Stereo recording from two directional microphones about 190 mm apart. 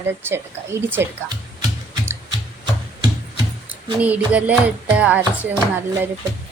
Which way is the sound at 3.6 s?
5° right (ahead or behind).